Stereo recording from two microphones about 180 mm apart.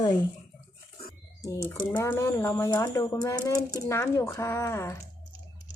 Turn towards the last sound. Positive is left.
turn(degrees=15)  # may be behind; listen again after turning